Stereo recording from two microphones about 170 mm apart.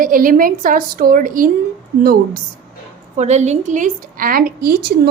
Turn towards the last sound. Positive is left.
turn(degrees=-65)  # may be behind; listen again after turning